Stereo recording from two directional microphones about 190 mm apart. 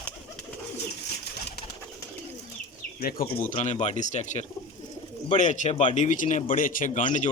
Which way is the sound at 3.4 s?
35° left (ahead or behind).